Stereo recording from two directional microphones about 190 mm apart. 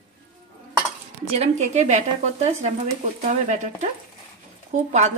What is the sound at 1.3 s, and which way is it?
Speech, 35° right (ahead or behind).